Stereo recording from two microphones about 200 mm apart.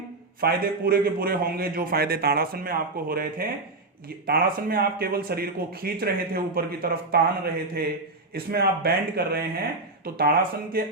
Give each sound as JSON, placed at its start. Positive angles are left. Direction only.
{"t": 0.4, "sound": "speech", "side_deg": -50}